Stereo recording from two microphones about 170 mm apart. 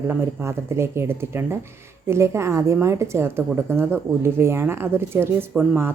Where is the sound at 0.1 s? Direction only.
10° right (ahead or behind).